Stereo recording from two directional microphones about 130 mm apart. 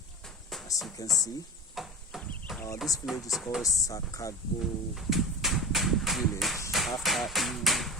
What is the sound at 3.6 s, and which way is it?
Speech, 25° left (ahead or behind).